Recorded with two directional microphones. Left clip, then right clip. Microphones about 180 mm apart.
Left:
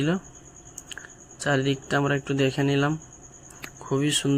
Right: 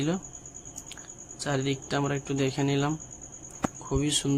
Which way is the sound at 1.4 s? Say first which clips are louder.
Left 5 dB; 20° left (ahead or behind).